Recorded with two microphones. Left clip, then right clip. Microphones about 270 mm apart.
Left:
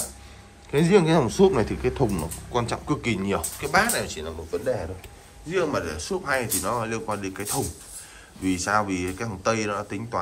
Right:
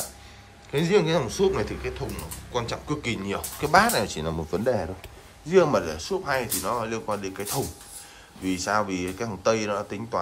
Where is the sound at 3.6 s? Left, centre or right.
Centre.